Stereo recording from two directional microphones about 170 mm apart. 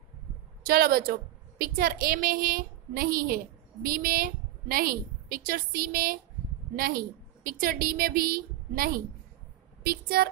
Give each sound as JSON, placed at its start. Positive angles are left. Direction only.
{"t": 0.7, "sound": "a woman's voice", "side_deg": -60}